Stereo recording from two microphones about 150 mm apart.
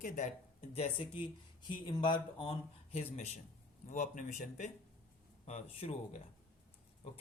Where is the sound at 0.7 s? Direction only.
40° left (ahead or behind).